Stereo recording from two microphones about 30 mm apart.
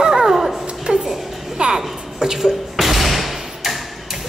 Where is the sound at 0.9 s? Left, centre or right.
Right.